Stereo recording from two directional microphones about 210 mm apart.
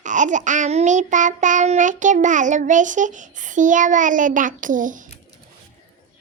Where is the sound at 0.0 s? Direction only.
35° right (ahead or behind).